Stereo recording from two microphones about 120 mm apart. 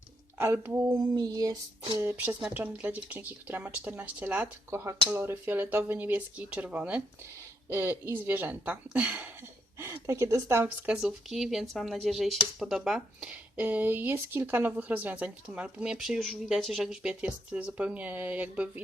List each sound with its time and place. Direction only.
0.3 s speech: 20° right (ahead or behind)
0.9 s a sound: 35° right (ahead or behind)
2.0 s speech: 15° right (ahead or behind)
7.7 s speech: 20° right (ahead or behind)
10.8 s speech: 5° right (ahead or behind)